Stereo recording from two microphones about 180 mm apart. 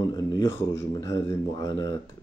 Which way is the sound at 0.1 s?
20° left (ahead or behind).